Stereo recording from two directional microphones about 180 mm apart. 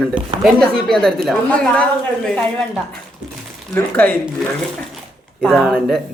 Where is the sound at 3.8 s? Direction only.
10° left (ahead or behind).